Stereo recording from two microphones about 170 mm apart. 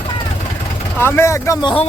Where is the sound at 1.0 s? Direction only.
15° left (ahead or behind).